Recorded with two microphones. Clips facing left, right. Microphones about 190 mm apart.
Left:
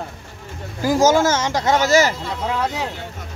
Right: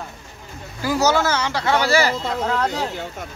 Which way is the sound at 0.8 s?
45° left (ahead or behind).